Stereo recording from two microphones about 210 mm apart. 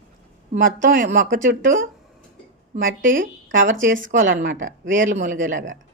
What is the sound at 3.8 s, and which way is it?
Speech, 65° right (ahead or behind).